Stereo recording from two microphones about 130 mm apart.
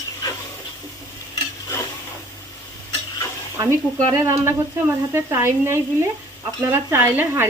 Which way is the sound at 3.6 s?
25° right (ahead or behind).